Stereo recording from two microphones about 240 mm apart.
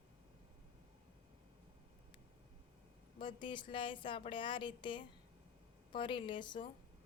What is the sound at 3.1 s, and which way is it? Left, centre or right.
A woman's voice, centre.